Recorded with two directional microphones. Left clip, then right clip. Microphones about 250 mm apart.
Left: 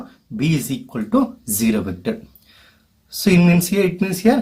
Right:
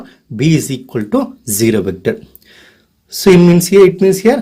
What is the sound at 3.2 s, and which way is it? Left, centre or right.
Speech, right.